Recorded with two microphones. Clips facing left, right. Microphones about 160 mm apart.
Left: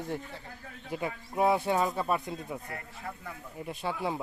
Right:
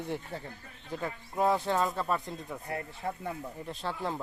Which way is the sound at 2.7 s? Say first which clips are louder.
Right 5 dB; 30° right (ahead or behind).